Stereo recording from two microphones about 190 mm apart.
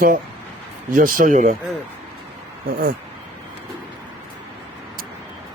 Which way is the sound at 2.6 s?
50° right (ahead or behind).